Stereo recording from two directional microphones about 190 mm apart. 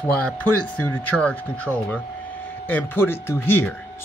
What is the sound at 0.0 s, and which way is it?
Speech, 10° left (ahead or behind).